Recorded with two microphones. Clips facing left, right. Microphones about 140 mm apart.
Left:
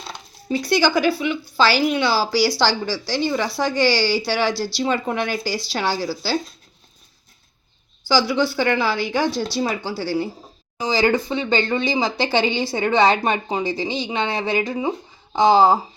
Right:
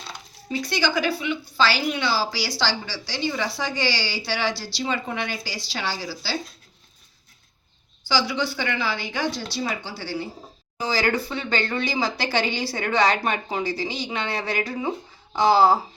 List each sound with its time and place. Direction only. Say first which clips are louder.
0.6 s a woman's voice: left 6 dB; 40° left (ahead or behind)
8.0 s a woman's voice: left 6 dB; 40° left (ahead or behind)
10.8 s speech: left 5 dB; 20° left (ahead or behind)